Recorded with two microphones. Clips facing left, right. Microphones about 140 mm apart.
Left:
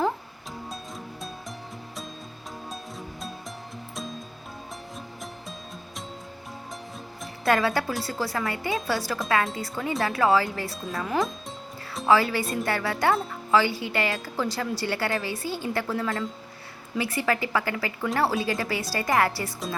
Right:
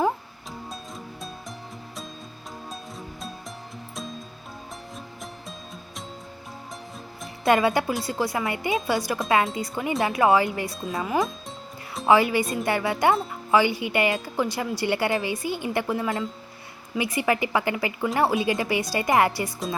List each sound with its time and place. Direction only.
0.7 s music: centre (ahead or behind)
2.6 s music: centre (ahead or behind)
4.9 s music: centre (ahead or behind)
7.4 s speech: 20° right (ahead or behind)
10.7 s speech: centre (ahead or behind)
12.0 s speech: 15° right (ahead or behind)